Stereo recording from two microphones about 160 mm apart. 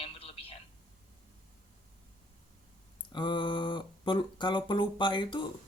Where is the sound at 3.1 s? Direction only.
30° left (ahead or behind).